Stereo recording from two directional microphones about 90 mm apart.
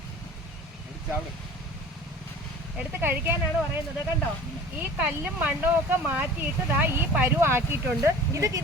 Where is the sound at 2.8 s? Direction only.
20° right (ahead or behind).